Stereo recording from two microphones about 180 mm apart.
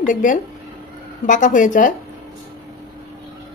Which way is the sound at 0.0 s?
45° left (ahead or behind).